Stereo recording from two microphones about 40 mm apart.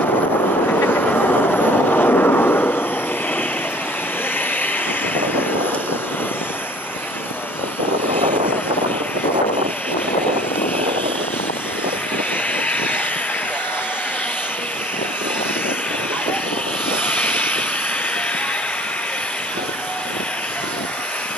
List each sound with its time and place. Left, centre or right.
0.7 s vehicle: left
16.9 s vehicle: left